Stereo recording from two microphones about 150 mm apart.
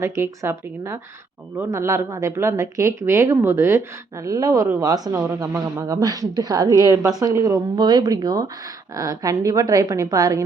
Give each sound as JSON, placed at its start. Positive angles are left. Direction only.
{"t": 0.0, "sound": "speech", "side_deg": -15}